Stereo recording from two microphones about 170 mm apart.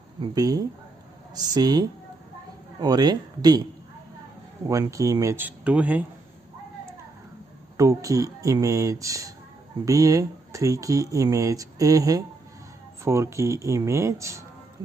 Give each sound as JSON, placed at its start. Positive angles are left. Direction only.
{"t": 0.2, "sound": "speech", "side_deg": -20}
{"t": 4.6, "sound": "speech", "side_deg": -20}
{"t": 7.7, "sound": "speech", "side_deg": -20}